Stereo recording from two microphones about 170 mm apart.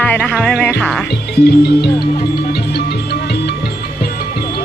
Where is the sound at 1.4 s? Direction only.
70° left (ahead or behind).